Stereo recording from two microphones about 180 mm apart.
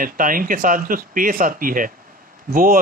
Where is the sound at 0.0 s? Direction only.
50° right (ahead or behind).